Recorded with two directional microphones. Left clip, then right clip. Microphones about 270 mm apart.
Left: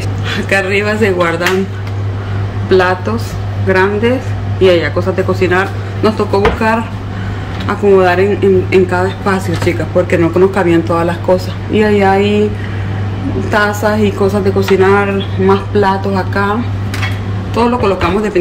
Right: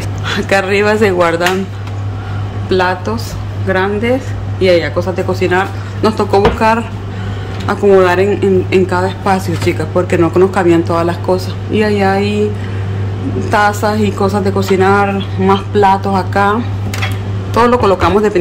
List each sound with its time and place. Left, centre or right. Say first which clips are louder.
0.3 s speech: right 1 dB; centre
2.7 s a man's voice: left 2 dB; centre
13.5 s speech: right 1 dB; centre
17.6 s speech: right 3 dB; centre